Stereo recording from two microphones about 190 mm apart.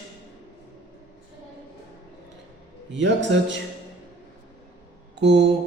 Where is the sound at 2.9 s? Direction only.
70° right (ahead or behind).